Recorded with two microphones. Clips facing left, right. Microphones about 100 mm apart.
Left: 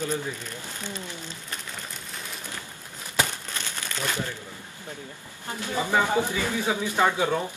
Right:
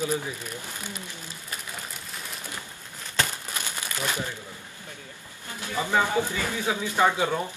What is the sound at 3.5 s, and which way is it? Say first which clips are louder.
Crumpling: right 1 dB; 15° right (ahead or behind).